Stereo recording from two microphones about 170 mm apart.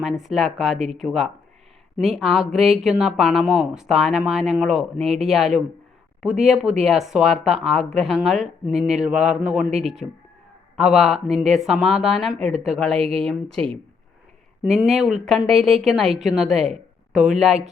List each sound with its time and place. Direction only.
0.0 s speech: 5° right (ahead or behind)
12.4 s speech: 40° right (ahead or behind)
12.6 s speech: centre (ahead or behind)
13.0 s speech: 35° right (ahead or behind)
14.6 s speech: 5° right (ahead or behind)